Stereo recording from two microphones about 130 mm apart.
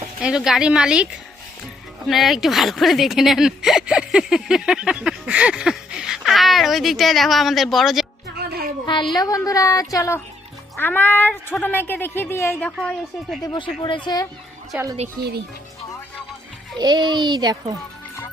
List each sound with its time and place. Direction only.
0.2 s speech: 5° right (ahead or behind)
2.0 s speech: centre (ahead or behind)
9.1 s a woman's voice: 25° left (ahead or behind)
10.8 s speech: 15° left (ahead or behind)
13.4 s speech: 35° left (ahead or behind)
14.7 s a woman's voice: 10° right (ahead or behind)
16.7 s a child's voice: 35° right (ahead or behind)